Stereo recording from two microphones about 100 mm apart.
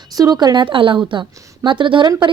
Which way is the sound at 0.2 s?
40° right (ahead or behind).